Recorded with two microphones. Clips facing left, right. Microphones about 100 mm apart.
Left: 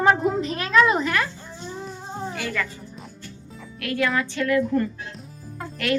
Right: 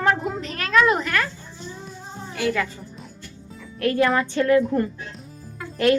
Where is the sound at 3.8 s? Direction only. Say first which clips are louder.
Right 4 dB; 35° right (ahead or behind).